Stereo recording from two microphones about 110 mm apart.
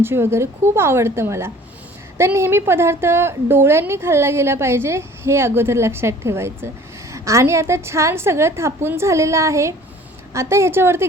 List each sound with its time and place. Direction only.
0.0 s a woman's voice: 20° right (ahead or behind)